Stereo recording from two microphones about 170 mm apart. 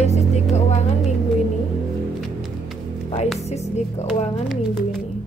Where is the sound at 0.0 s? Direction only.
40° left (ahead or behind).